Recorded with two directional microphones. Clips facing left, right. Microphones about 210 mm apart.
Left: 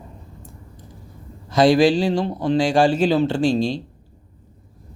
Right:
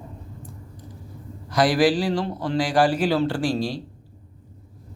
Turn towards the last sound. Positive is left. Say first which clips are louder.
# left 5 dB
turn(degrees=25)  # may be behind; listen again after turning